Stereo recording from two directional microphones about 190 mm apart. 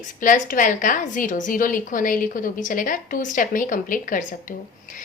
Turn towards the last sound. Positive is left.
turn(degrees=45)  # may be behind; listen again after turning